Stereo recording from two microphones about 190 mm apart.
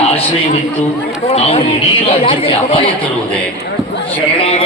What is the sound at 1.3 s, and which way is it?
Speech, 30° left (ahead or behind).